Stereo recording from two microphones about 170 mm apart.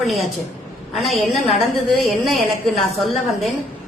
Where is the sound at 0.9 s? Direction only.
Centre (ahead or behind).